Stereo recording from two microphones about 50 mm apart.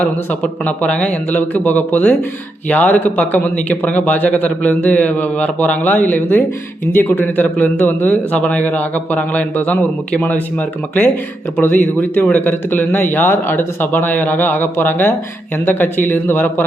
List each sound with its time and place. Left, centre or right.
0.0 s a man's voice: left